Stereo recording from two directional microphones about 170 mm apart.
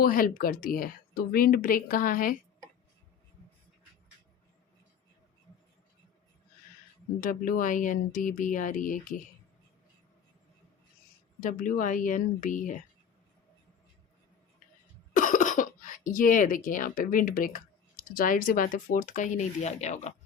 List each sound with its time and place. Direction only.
0.0 s speech: 55° left (ahead or behind)
7.2 s speech: 50° left (ahead or behind)
11.3 s speech: 55° left (ahead or behind)
15.1 s speech: 50° left (ahead or behind)